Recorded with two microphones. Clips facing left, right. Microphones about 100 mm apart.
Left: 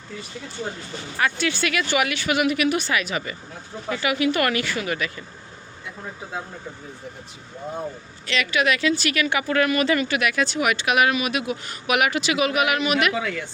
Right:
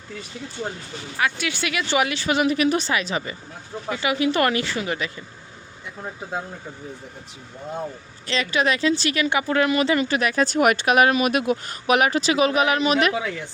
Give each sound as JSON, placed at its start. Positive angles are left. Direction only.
{"t": 1.2, "sound": "speech", "side_deg": -10}
{"t": 8.3, "sound": "speech", "side_deg": -30}
{"t": 13.1, "sound": "speech", "side_deg": -20}